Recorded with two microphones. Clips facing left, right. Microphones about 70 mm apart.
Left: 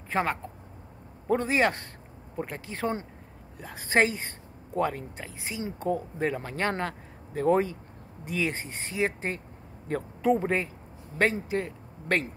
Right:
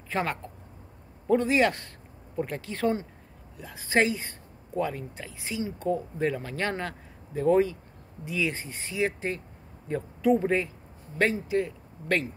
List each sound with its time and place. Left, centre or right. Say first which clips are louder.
0.1 s speech: left 2 dB; left
3.5 s speech: left 1 dB; left
10.3 s speech: right 2 dB; left